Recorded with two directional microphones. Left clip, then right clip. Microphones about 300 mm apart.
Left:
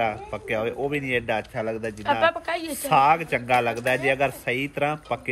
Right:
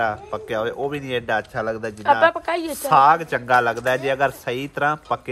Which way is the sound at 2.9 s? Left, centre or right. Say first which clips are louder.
Right 4 dB; centre.